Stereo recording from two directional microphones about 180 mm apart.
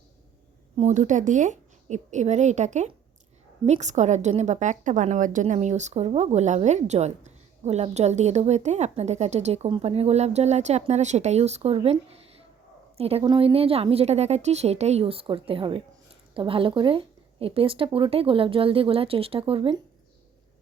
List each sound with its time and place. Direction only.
0.8 s a woman's voice: 40° right (ahead or behind)